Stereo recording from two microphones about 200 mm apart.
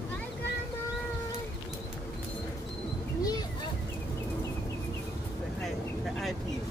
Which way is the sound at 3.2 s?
20° left (ahead or behind).